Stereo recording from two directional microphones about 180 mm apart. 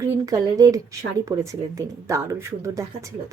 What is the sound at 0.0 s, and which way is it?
A woman's voice, 20° right (ahead or behind).